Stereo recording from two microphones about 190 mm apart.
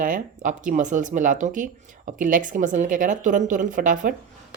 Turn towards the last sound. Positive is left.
turn(degrees=-45)  # may be behind; listen again after turning